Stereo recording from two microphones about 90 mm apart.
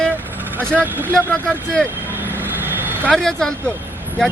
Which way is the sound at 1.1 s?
10° left (ahead or behind).